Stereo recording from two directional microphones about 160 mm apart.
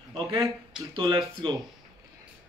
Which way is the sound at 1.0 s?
25° right (ahead or behind).